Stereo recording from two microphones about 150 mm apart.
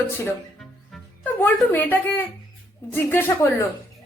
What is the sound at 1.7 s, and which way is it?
A woman's voice, 15° left (ahead or behind).